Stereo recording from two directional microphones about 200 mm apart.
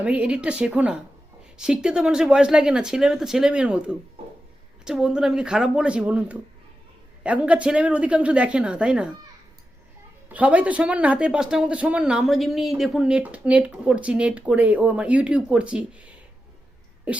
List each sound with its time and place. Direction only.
0.0 s speech: 5° right (ahead or behind)
10.2 s speech: 5° right (ahead or behind)
17.1 s cough: 5° right (ahead or behind)